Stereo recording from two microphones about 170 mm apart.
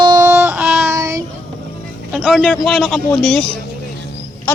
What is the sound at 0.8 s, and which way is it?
Speech, 20° right (ahead or behind).